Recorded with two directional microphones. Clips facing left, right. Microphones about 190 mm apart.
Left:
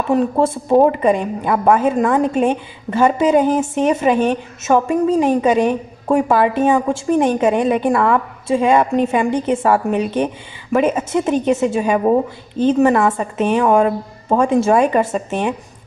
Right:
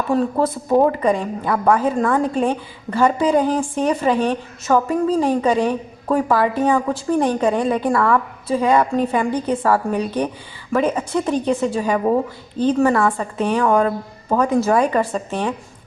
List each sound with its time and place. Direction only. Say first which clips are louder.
0.1 s a woman's voice: left 3 dB; 25° left (ahead or behind)